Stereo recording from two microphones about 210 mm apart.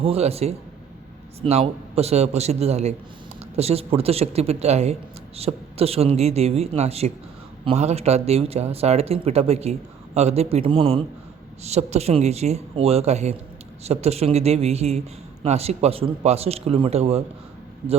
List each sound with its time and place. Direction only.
0.0 s speech: 30° right (ahead or behind)